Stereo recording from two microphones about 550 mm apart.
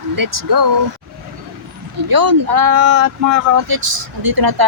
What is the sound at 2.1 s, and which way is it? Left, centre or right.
Speech, right.